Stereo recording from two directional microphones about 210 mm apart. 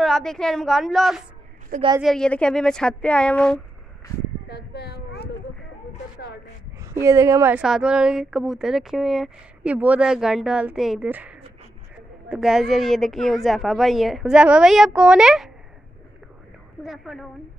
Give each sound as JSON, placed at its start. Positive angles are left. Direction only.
{"t": 0.0, "sound": "speech", "side_deg": 0}
{"t": 4.5, "sound": "a sound", "side_deg": 50}
{"t": 6.8, "sound": "speech", "side_deg": -15}
{"t": 16.8, "sound": "speech", "side_deg": 0}